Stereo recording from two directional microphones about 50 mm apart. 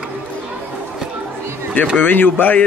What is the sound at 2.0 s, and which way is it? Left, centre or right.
Speech, left.